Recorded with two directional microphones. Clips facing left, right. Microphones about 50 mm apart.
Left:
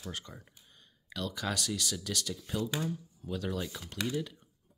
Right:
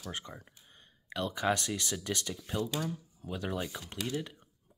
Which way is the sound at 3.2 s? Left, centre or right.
Centre.